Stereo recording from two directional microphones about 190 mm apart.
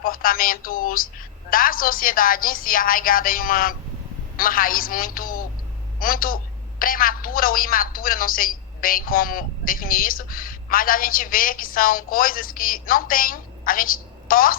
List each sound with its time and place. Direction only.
0.0 s a woman's voice: 50° left (ahead or behind)